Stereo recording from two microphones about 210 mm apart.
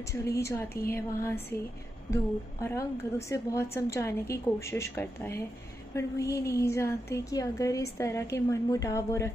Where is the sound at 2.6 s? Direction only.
15° left (ahead or behind).